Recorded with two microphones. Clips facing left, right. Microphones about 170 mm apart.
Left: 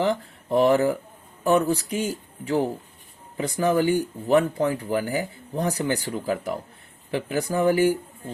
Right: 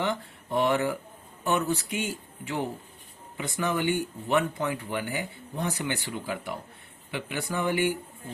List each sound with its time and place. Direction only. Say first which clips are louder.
0.0 s speech: left 6 dB; 35° left (ahead or behind)